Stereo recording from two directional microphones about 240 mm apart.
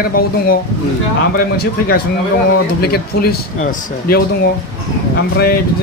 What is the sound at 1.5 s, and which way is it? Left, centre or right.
Speech, left.